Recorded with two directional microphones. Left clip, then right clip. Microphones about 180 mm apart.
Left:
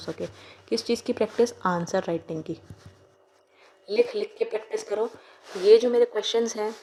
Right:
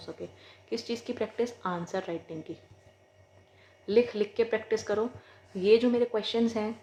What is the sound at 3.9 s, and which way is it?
Speech, 40° left (ahead or behind).